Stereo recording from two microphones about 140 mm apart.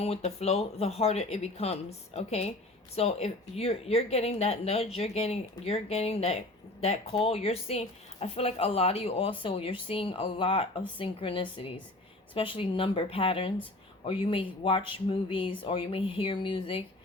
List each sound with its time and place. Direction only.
0.0 s speech: 45° left (ahead or behind)